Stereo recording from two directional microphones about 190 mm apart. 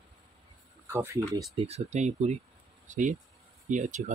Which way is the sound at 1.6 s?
35° right (ahead or behind).